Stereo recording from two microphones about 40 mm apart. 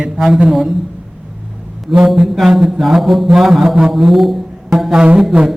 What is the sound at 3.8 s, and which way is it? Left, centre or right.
A man's voice, centre.